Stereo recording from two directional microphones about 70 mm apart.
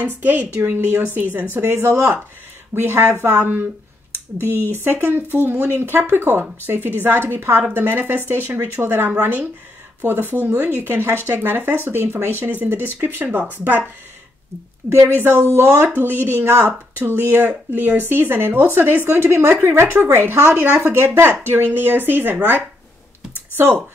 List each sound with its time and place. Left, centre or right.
0.0 s speech: right
4.6 s speech: right
15.1 s speech: right
15.4 s speech: right